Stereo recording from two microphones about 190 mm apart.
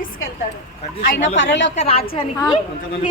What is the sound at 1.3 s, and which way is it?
Speech, 75° left (ahead or behind).